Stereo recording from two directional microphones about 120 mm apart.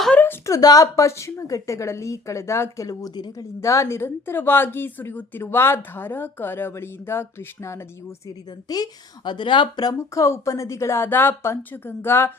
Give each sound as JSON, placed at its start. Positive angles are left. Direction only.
{"t": 0.2, "sound": "a woman's voice", "side_deg": 20}
{"t": 8.7, "sound": "speech", "side_deg": 35}
{"t": 10.2, "sound": "a woman's voice", "side_deg": 25}